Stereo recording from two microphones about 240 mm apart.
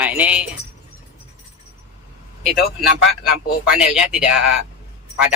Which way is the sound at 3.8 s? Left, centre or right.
Centre.